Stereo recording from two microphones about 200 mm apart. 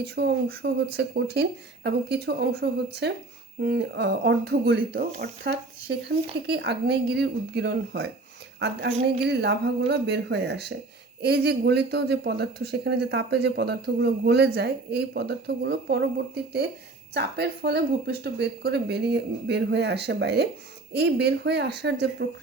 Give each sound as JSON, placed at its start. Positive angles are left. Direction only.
{"t": 0.0, "sound": "a woman's voice", "side_deg": -50}